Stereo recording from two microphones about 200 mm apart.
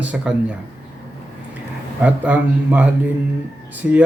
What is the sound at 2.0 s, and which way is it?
Speech, 5° right (ahead or behind).